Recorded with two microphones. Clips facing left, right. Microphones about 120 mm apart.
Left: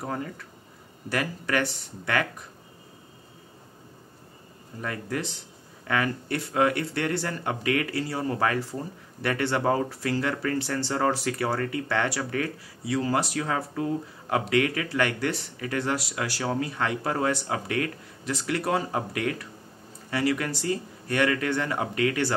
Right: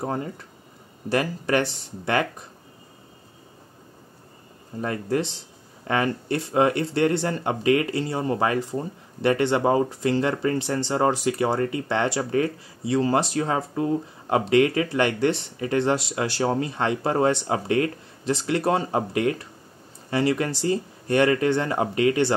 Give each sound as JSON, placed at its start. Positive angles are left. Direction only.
{"t": 0.0, "sound": "speech", "side_deg": -30}
{"t": 4.8, "sound": "speech", "side_deg": -30}